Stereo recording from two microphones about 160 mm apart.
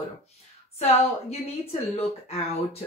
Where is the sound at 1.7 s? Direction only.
40° left (ahead or behind).